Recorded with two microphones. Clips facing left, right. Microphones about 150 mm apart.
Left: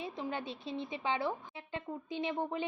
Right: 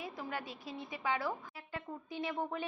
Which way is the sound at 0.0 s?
25° left (ahead or behind).